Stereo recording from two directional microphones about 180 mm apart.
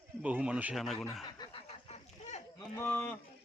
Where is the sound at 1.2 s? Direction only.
25° left (ahead or behind).